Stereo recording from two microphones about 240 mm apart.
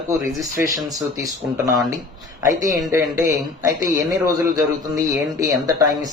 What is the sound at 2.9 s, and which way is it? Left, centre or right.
Speech, centre.